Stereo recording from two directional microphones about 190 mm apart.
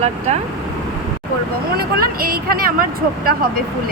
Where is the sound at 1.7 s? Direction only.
50° right (ahead or behind).